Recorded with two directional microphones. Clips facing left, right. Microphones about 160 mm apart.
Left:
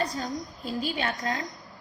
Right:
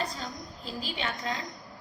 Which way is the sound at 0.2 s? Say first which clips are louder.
Left 6 dB; 45° left (ahead or behind).